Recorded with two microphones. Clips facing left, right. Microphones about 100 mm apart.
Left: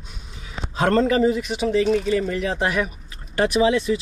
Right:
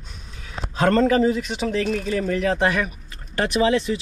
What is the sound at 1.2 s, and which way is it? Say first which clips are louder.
Speech: left 1 dB; centre (ahead or behind).